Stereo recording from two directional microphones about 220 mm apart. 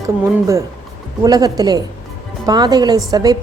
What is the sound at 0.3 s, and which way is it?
A woman's voice, 15° right (ahead or behind).